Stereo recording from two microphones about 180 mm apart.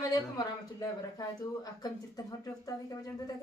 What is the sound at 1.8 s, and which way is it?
Speech, 20° left (ahead or behind).